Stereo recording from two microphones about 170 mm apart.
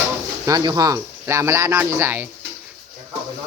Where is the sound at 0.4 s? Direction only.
20° right (ahead or behind).